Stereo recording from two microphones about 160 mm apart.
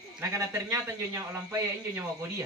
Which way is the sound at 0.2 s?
15° right (ahead or behind).